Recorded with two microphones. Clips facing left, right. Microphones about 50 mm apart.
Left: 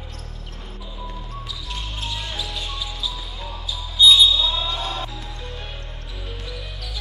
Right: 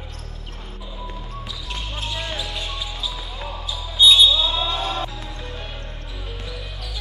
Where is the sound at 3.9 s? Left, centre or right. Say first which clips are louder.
Even; right.